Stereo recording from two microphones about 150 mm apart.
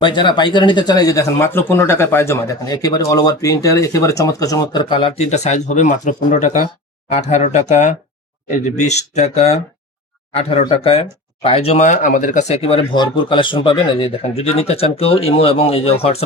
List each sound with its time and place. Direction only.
0.0 s speech: 30° left (ahead or behind)